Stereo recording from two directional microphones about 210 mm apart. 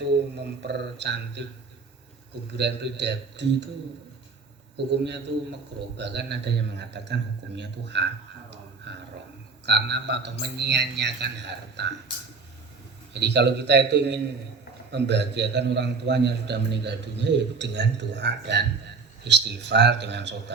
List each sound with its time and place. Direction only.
0.7 s a man's voice: 55° right (ahead or behind)
2.5 s a man's voice: 55° right (ahead or behind)
5.0 s a man's voice: 55° right (ahead or behind)
8.9 s a sound: 55° right (ahead or behind)
9.6 s a man's voice: 55° right (ahead or behind)
13.1 s a man's voice: 55° right (ahead or behind)